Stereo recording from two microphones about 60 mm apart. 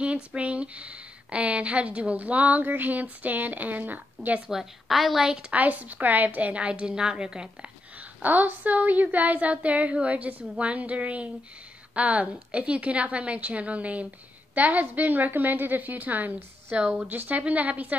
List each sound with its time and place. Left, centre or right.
0.0 s speech: centre
4.5 s a woman's voice: centre
5.5 s speech: right
8.2 s speech: right